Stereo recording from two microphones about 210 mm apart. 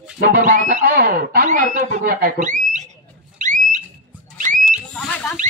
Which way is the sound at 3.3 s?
35° right (ahead or behind).